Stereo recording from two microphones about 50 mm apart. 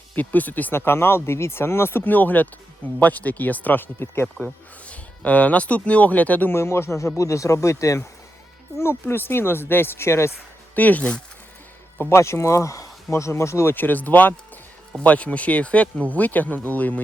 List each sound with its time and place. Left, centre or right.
0.2 s speech: left
0.7 s speech: left
2.0 s speech: left
4.0 s speech: left
4.9 s speech: left
6.5 s speech: left
7.2 s speech: left
8.8 s a woman's voice: left
10.8 s speech: left
11.9 s speech: left
13.7 s speech: left